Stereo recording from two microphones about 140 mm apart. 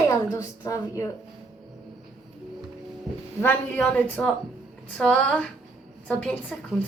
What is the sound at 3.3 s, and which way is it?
A woman's voice, 10° left (ahead or behind).